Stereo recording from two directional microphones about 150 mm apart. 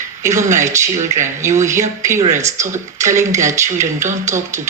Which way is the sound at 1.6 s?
20° right (ahead or behind).